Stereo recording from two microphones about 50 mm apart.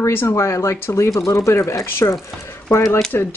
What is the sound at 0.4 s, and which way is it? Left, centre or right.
Speech, left.